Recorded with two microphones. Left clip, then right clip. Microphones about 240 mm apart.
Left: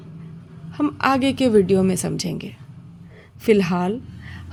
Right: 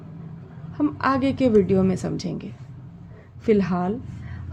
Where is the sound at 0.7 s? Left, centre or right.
Left.